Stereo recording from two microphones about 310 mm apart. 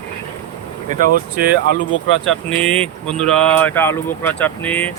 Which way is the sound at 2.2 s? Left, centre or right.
Centre.